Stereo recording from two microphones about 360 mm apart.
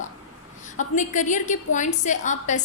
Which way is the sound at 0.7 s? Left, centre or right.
Left.